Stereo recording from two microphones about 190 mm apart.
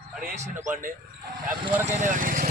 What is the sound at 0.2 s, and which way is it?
Speech, 35° right (ahead or behind).